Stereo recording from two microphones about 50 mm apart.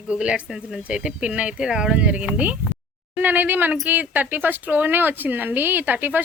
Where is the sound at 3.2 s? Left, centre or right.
Right.